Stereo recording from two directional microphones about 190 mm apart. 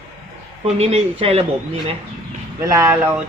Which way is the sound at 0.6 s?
30° right (ahead or behind).